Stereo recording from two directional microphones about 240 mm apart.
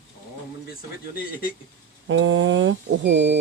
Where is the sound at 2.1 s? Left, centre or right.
Right.